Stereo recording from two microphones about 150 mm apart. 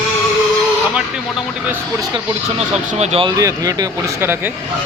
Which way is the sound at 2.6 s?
45° right (ahead or behind).